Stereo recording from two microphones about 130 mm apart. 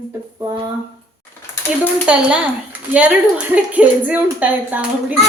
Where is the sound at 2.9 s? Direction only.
10° right (ahead or behind).